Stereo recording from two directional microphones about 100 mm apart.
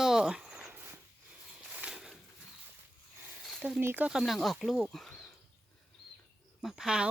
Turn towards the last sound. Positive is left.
turn(degrees=-5)  # may be behind; listen again after turning